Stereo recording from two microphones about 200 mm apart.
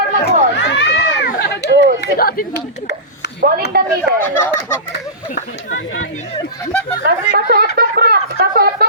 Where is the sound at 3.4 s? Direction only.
45° right (ahead or behind).